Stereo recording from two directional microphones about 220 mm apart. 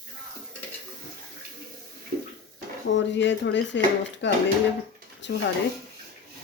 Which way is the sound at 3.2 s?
55° left (ahead or behind).